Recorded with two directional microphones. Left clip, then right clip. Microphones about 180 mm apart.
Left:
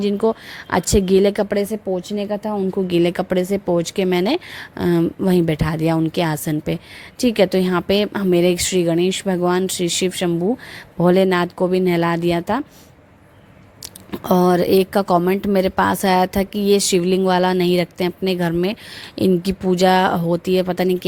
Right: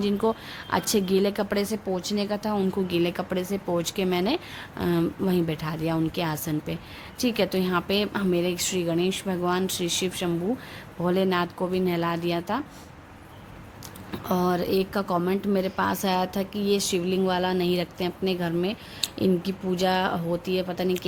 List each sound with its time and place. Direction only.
0.0 s speech: 35° left (ahead or behind)
14.3 s a woman's voice: 45° left (ahead or behind)